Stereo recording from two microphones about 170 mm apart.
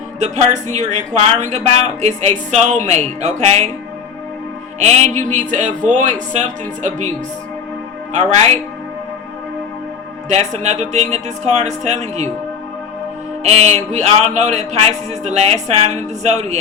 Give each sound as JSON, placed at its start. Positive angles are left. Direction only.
{"t": 0.2, "sound": "speech", "side_deg": -40}
{"t": 4.8, "sound": "speech", "side_deg": -40}
{"t": 8.1, "sound": "speech", "side_deg": -40}
{"t": 10.2, "sound": "speech", "side_deg": -45}
{"t": 13.4, "sound": "speech", "side_deg": -40}